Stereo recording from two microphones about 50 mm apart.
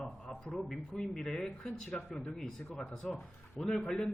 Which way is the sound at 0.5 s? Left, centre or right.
Centre.